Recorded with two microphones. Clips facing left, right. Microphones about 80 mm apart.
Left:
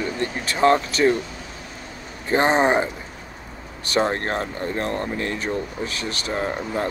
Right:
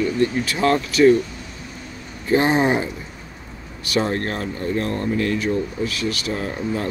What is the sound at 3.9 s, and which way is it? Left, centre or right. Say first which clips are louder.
Speech: even; left.